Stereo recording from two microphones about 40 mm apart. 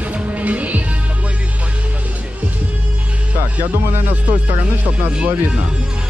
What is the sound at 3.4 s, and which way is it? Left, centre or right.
Speech, right.